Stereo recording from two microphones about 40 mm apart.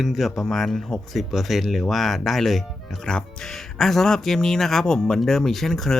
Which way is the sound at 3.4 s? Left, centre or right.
Centre.